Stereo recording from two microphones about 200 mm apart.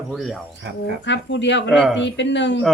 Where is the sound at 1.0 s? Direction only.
65° left (ahead or behind).